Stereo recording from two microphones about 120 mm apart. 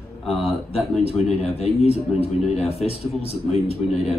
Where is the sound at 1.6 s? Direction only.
60° left (ahead or behind).